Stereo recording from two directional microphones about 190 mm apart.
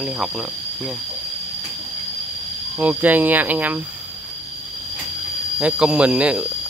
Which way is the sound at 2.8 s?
10° right (ahead or behind).